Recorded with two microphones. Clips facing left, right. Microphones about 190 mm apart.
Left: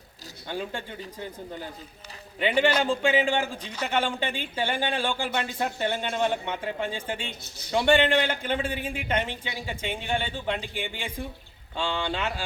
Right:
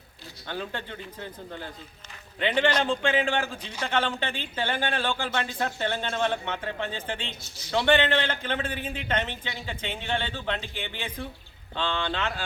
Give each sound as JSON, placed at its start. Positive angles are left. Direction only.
{"t": 0.4, "sound": "speech", "side_deg": 10}